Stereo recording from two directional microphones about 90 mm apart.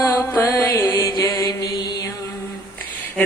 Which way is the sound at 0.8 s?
40° left (ahead or behind).